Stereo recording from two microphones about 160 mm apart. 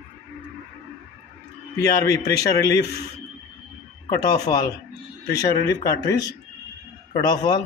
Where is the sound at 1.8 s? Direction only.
20° left (ahead or behind).